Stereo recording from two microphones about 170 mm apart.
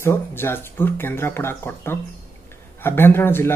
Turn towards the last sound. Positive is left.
turn(degrees=15)  # may be behind; listen again after turning